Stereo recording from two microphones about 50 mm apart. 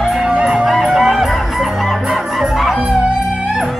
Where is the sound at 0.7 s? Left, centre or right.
Centre.